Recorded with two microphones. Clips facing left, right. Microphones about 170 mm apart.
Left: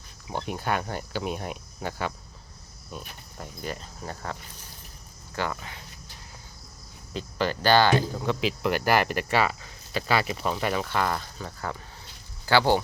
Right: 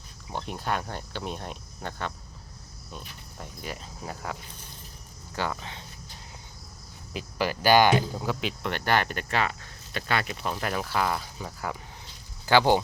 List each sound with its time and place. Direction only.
0.3 s speech: 5° left (ahead or behind); by 5.8 s 20° right (ahead or behind)
7.1 s speech: 10° right (ahead or behind)